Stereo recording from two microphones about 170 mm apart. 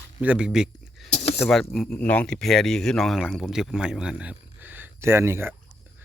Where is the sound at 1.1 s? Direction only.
40° left (ahead or behind).